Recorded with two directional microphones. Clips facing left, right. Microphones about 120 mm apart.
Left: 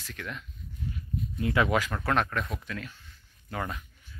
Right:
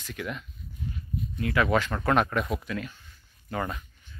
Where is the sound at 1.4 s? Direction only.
20° left (ahead or behind).